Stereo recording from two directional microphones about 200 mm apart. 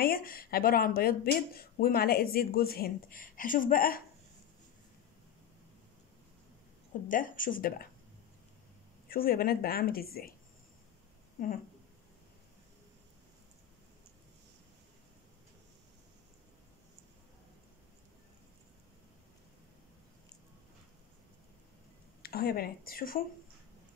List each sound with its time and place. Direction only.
0.0 s speech: 45° left (ahead or behind)
6.9 s speech: 40° left (ahead or behind)
9.1 s speech: 45° left (ahead or behind)
11.3 s speech: 45° left (ahead or behind)
22.2 s speech: 50° left (ahead or behind)